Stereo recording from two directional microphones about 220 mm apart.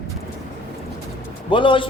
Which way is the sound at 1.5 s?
20° left (ahead or behind).